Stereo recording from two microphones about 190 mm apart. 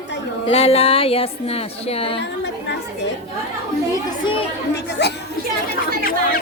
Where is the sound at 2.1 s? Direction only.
65° left (ahead or behind).